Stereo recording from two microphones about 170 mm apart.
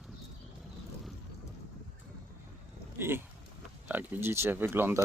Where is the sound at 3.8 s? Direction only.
10° right (ahead or behind).